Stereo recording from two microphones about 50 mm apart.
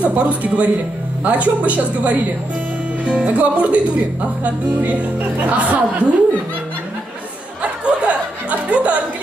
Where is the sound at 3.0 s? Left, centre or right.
Right.